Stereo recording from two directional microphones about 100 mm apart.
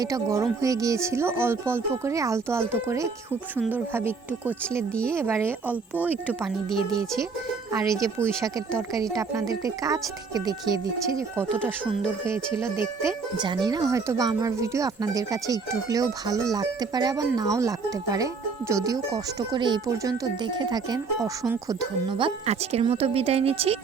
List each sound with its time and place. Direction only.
0.0 s speech: 30° right (ahead or behind); by 6.1 s 15° right (ahead or behind)
7.7 s speech: 30° right (ahead or behind)
12.5 s speech: 30° right (ahead or behind)
13.3 s speech: 50° right (ahead or behind)
19.9 s speech: 40° right (ahead or behind)
22.1 s speech: 75° right (ahead or behind)